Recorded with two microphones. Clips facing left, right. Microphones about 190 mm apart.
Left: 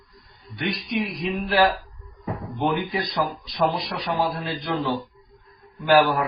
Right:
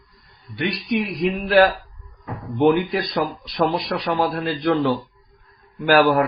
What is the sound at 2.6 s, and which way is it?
Speech, 70° right (ahead or behind).